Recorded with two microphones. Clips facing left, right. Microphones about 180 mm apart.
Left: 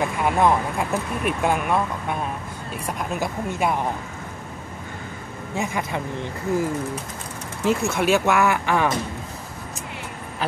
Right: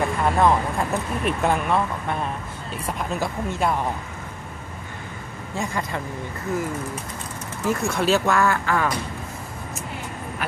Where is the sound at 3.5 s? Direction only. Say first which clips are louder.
Even; 10° left (ahead or behind).